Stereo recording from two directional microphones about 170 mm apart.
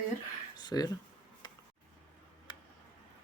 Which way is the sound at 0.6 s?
25° left (ahead or behind).